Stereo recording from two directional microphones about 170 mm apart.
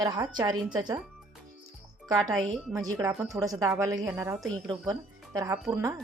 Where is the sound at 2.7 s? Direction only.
20° right (ahead or behind).